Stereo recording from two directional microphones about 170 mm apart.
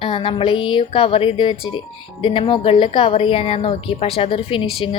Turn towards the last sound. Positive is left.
turn(degrees=30)  # may be behind; listen again after turning